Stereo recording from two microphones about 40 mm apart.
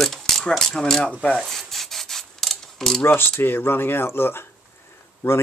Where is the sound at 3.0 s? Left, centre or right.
Left.